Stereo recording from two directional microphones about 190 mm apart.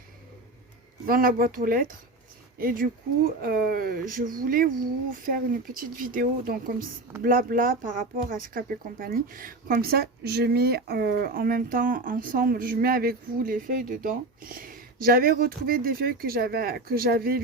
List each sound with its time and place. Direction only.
1.0 s speech: 50° right (ahead or behind)